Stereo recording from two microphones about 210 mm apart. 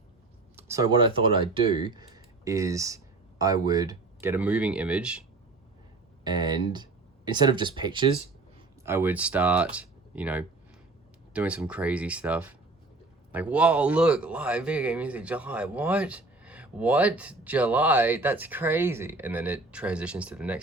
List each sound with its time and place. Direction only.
0.5 s speech: 15° right (ahead or behind)
6.2 s speech: 20° right (ahead or behind)
8.8 s speech: 10° right (ahead or behind)